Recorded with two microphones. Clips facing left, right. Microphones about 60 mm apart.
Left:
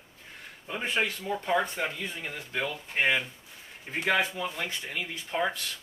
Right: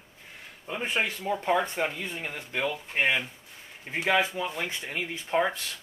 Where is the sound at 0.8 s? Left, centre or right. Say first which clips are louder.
Right 1 dB; centre.